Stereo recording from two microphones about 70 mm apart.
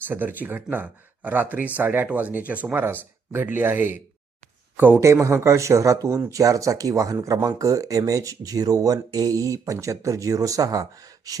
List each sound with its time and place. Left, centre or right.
0.0 s speech: right
4.9 s speech: right